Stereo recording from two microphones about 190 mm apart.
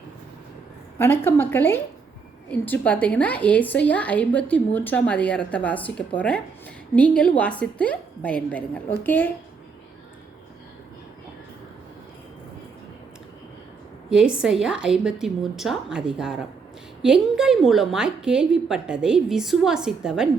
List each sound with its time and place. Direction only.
0.9 s a woman's voice: 10° left (ahead or behind)
14.1 s a woman's voice: 5° right (ahead or behind)